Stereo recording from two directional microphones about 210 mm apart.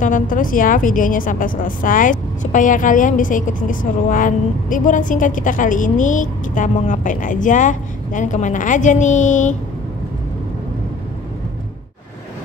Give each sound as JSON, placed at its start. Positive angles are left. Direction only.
{"t": 0.0, "sound": "a woman's voice", "side_deg": 40}